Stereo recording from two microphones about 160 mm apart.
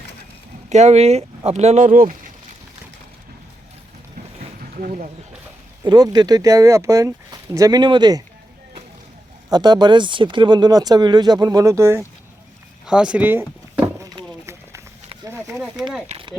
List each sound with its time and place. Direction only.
0.7 s speech: 45° right (ahead or behind)
4.6 s speech: 55° right (ahead or behind)
5.8 s speech: 25° right (ahead or behind)
9.5 s speech: 25° right (ahead or behind)
12.8 s a sound: 5° right (ahead or behind)